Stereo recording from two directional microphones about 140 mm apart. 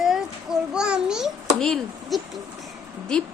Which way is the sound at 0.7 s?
5° right (ahead or behind).